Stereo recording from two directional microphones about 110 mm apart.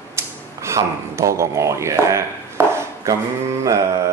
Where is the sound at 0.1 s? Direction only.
25° right (ahead or behind).